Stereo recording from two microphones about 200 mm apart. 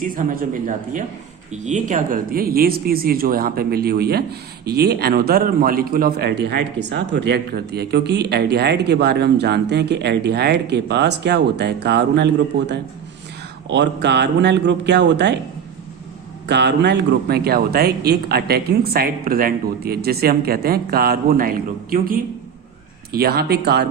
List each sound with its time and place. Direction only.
0.0 s speech: 45° right (ahead or behind); by 15.4 s 60° right (ahead or behind)
16.5 s speech: 60° right (ahead or behind)